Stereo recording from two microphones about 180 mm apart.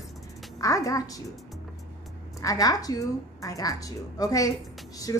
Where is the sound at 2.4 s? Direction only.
20° left (ahead or behind).